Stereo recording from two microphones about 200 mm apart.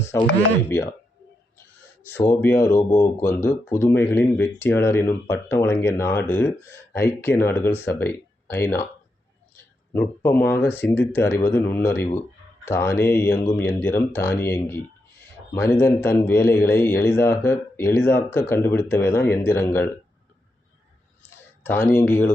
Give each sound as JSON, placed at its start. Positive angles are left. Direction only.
{"t": 0.1, "sound": "speech", "side_deg": 10}
{"t": 2.0, "sound": "speech", "side_deg": 10}
{"t": 9.9, "sound": "speech", "side_deg": 10}
{"t": 21.2, "sound": "a sound", "side_deg": 10}